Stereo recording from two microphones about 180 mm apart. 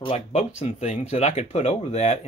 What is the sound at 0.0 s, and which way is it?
Speech, 35° left (ahead or behind).